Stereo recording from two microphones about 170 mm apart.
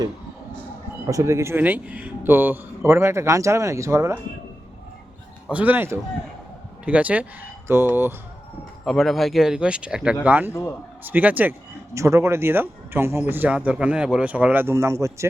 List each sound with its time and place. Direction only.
1.0 s speech: 15° right (ahead or behind)
5.5 s speech: 10° right (ahead or behind)
8.8 s speech: centre (ahead or behind)
10.5 s a man's voice: 15° left (ahead or behind)
11.0 s speech: 10° right (ahead or behind)